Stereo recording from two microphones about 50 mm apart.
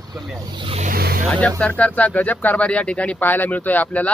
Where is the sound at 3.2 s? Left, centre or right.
Left.